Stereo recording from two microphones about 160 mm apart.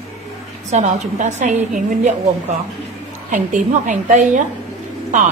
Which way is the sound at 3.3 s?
50° right (ahead or behind).